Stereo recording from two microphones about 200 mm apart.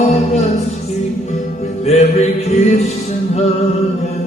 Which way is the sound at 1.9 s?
35° left (ahead or behind).